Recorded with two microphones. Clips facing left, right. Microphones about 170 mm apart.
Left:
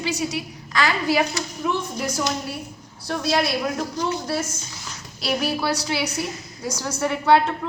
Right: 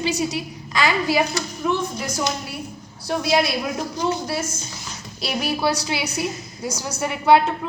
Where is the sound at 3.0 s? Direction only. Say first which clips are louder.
Right 3 dB; 10° right (ahead or behind).